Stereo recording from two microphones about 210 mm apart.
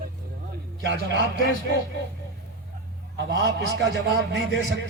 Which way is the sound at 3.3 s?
55° right (ahead or behind).